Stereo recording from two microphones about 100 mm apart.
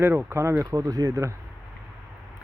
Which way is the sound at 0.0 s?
25° right (ahead or behind).